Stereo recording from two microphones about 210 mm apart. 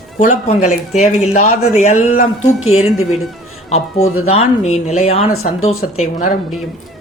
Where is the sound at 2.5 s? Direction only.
85° left.